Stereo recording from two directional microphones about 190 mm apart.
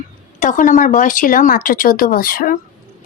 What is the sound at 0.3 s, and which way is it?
A woman's voice, 45° left (ahead or behind).